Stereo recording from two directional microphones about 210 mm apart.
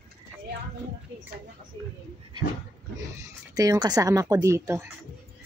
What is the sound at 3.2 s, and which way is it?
Speech, 15° right (ahead or behind).